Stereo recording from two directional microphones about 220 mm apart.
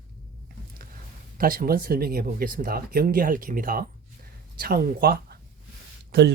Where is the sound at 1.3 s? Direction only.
40° right (ahead or behind).